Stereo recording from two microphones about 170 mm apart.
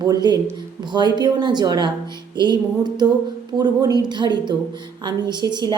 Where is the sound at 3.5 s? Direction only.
Centre (ahead or behind).